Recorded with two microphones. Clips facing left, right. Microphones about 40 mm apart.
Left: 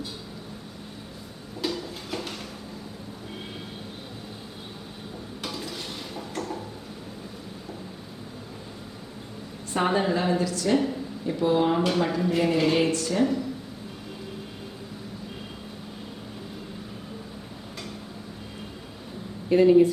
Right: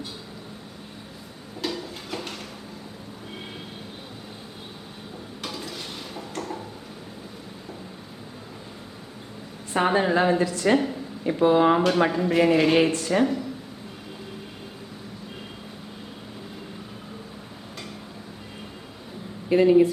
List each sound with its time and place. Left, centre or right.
1.6 s a sound: centre
5.4 s stir: centre
9.7 s a woman's voice: centre
10.2 s a woman's voice: right
11.9 s speech: right
12.3 s a woman's voice: centre
12.7 s speech: right
19.5 s a woman's voice: centre